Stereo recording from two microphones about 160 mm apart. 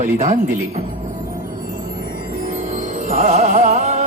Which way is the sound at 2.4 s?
50° right (ahead or behind).